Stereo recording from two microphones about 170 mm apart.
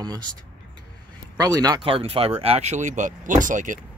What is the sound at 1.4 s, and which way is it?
Speech, 20° right (ahead or behind).